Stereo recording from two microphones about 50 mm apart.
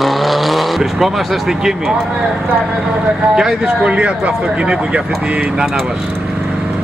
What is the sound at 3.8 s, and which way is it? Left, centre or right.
Speech, right.